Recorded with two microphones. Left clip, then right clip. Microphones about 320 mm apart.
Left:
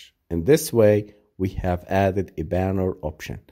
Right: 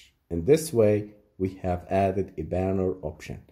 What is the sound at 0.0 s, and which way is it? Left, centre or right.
Speech, left.